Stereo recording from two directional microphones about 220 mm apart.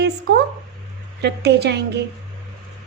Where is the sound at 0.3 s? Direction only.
50° right (ahead or behind).